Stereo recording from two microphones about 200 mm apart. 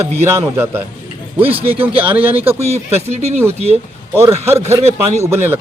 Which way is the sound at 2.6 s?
30° right (ahead or behind).